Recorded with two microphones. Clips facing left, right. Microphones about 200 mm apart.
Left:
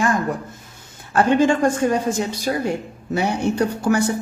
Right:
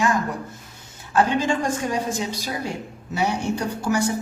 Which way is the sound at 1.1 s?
55° left (ahead or behind).